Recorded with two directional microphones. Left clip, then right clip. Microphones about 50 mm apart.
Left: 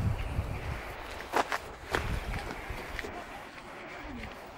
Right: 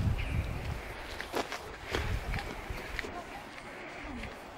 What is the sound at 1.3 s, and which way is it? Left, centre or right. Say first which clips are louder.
Walk: left 7 dB; left.